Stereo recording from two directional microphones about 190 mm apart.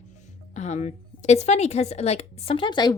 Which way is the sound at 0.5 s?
35° left (ahead or behind).